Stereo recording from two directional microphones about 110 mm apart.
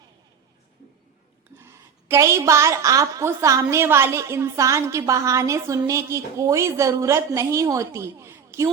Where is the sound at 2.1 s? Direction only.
25° right (ahead or behind).